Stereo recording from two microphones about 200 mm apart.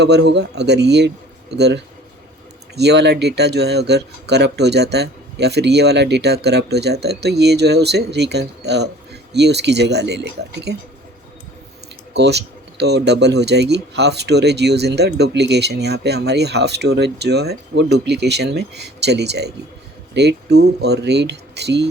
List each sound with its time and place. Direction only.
0.0 s speech: 55° right (ahead or behind)
12.1 s speech: 55° right (ahead or behind)